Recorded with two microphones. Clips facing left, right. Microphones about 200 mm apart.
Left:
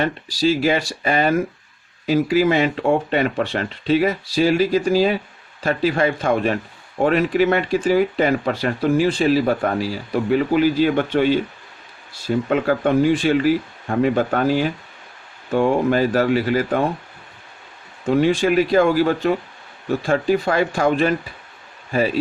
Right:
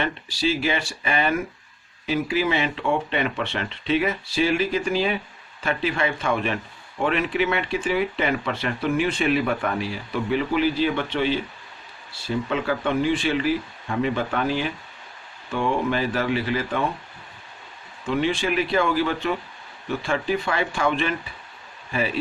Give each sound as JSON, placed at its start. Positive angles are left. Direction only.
{"t": 0.0, "sound": "speech", "side_deg": 40}
{"t": 18.0, "sound": "speech", "side_deg": 40}